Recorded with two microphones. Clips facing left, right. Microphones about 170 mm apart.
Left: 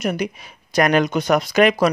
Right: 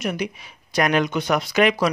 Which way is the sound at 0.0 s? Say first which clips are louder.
Left 3 dB; 45° left (ahead or behind).